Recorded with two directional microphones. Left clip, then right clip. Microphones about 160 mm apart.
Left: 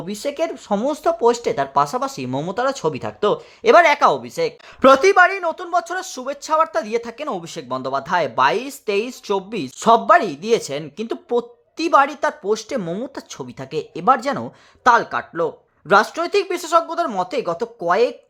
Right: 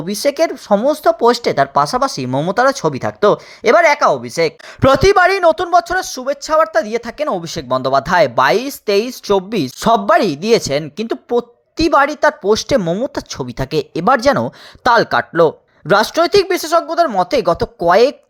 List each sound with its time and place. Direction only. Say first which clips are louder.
0.2 s speech: right 8 dB; 20° right (ahead or behind)
1.2 s speech: right 5 dB; 30° right (ahead or behind)
3.8 s speech: right 3 dB; 5° right (ahead or behind)
4.2 s speech: right 6 dB; 30° right (ahead or behind)